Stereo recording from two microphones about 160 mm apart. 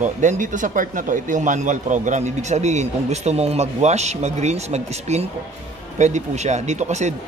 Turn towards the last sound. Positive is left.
turn(degrees=-45)  # may be behind; listen again after turning